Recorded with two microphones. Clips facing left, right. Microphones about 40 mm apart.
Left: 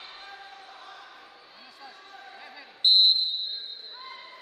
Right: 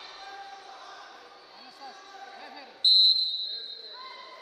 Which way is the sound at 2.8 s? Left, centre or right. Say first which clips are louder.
Left 1 dB; centre.